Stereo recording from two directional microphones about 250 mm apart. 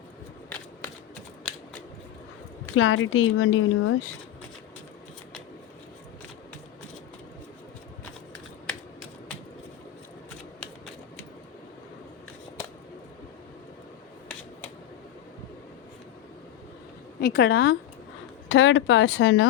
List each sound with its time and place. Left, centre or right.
2.7 s speech: left
17.2 s a woman's voice: left